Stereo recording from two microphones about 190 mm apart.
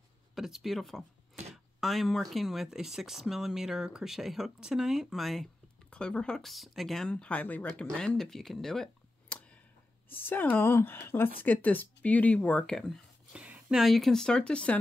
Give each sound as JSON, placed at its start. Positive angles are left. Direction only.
{"t": 0.3, "sound": "speech", "side_deg": 0}